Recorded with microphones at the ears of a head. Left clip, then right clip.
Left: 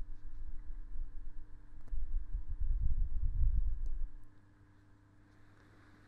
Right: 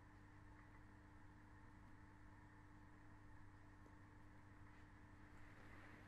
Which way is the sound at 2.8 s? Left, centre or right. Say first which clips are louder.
Left 7 dB; left.